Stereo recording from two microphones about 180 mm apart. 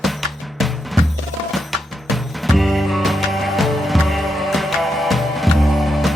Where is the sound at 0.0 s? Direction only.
Centre (ahead or behind).